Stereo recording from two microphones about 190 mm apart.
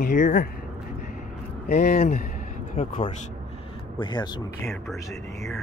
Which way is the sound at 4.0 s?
20° left (ahead or behind).